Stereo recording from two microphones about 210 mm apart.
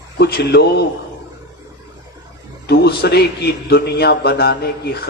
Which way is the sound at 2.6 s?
50° left (ahead or behind).